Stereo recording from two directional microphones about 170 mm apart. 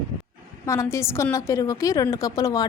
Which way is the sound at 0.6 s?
15° left (ahead or behind).